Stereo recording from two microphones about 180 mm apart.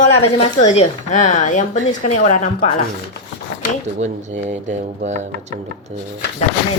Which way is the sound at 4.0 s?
40° right (ahead or behind).